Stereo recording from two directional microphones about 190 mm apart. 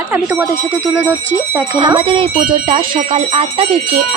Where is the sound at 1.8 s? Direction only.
25° right (ahead or behind).